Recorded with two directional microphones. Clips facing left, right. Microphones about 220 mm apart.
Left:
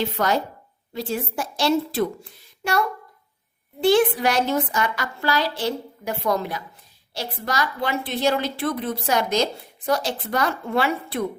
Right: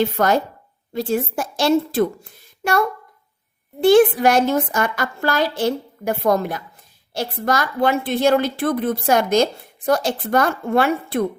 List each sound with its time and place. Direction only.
0.0 s a woman's voice: 50° right (ahead or behind)